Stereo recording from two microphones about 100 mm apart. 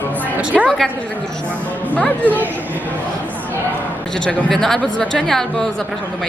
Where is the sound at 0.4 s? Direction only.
15° right (ahead or behind).